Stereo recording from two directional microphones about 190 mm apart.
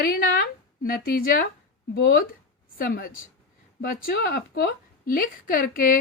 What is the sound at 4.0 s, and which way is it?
A woman's voice, 60° left (ahead or behind).